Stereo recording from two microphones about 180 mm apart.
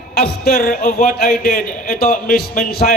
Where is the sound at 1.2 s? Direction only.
55° left (ahead or behind).